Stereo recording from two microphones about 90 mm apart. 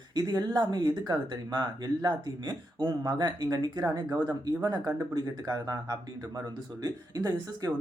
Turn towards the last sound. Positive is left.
turn(degrees=-45)  # may be behind; listen again after turning